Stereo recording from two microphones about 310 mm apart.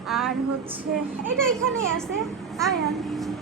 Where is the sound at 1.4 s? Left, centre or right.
Centre.